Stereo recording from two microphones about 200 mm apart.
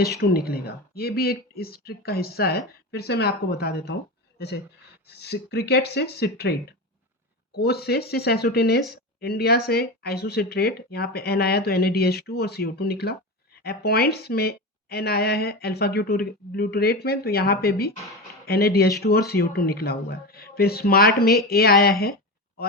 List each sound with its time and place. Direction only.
0.2 s speech: 50° left (ahead or behind)